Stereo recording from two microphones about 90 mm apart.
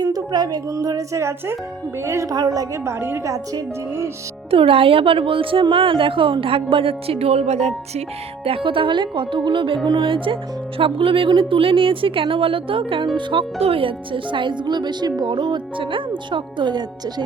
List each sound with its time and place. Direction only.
0.0 s a woman's voice: 50° right (ahead or behind); by 2.3 s 35° right (ahead or behind)
2.3 s speech: 45° right (ahead or behind)
2.8 s a woman's voice: 30° right (ahead or behind)
4.5 s a woman's voice: 90° right
8.4 s speech: 85° right
10.8 s a woman's voice: 80° right; by 17.2 s 55° right (ahead or behind)